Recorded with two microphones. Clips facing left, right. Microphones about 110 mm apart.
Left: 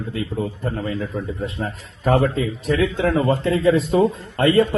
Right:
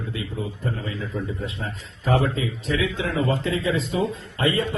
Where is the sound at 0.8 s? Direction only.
45° left (ahead or behind).